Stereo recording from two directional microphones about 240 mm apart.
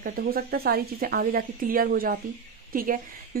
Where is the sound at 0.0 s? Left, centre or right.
Right.